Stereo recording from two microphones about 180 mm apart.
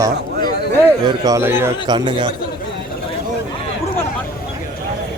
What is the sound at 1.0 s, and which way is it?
Speech, 20° right (ahead or behind).